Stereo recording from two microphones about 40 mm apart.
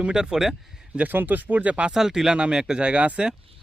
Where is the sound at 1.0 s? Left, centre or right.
Right.